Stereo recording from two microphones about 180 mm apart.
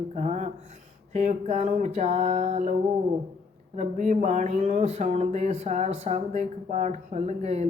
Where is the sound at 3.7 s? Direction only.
40° right (ahead or behind).